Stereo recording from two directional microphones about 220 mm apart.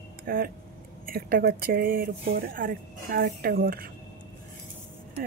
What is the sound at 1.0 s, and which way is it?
Speech, 40° right (ahead or behind).